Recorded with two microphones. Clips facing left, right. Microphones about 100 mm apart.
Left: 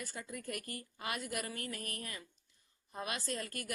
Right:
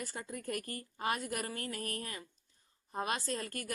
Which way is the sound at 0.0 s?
35° right (ahead or behind).